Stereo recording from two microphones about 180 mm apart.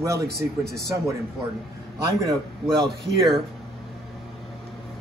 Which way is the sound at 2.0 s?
20° right (ahead or behind).